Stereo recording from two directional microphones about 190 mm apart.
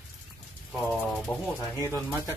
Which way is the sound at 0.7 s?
5° left (ahead or behind).